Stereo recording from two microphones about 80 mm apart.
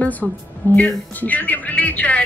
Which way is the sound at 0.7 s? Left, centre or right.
Centre.